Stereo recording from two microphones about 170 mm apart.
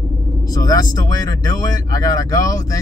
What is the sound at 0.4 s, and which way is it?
Speech, 20° left (ahead or behind).